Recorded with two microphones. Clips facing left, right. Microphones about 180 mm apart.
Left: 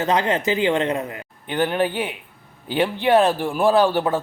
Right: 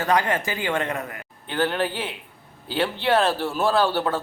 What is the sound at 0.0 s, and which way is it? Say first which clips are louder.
Speech: left 2 dB; 20° left (ahead or behind).